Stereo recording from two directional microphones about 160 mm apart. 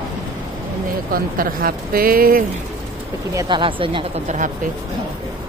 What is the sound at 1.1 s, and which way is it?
Speech, 65° right (ahead or behind).